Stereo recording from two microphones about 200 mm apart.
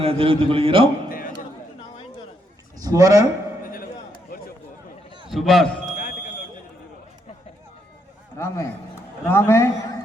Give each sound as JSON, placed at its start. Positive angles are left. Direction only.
{"t": 0.0, "sound": "a man's voice", "side_deg": -30}
{"t": 2.7, "sound": "a man's voice", "side_deg": -15}
{"t": 3.6, "sound": "chop", "side_deg": 45}
{"t": 5.3, "sound": "speech", "side_deg": 0}
{"t": 8.4, "sound": "a man's voice", "side_deg": 10}